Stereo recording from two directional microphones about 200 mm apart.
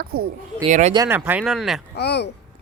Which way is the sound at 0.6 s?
35° right (ahead or behind).